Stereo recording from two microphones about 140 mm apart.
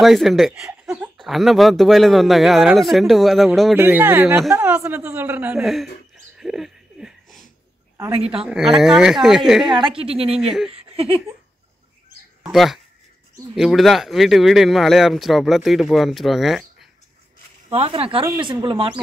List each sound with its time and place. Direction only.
0.0 s speech: centre (ahead or behind)
3.7 s a woman's voice: 15° right (ahead or behind)
5.6 s speech: centre (ahead or behind)
6.3 s a sound: 5° right (ahead or behind)
8.5 s speech: 5° right (ahead or behind)
9.8 s a woman's voice: 40° right (ahead or behind)
12.4 s speech: centre (ahead or behind)
17.6 s a woman's voice: 45° right (ahead or behind)